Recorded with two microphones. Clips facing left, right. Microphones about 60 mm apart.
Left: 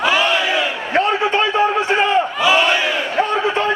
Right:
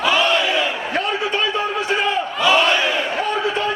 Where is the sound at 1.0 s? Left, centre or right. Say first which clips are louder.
Left 6 dB; left.